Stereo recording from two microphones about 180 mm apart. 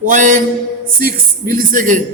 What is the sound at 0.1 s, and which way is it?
A man's voice, 45° right (ahead or behind).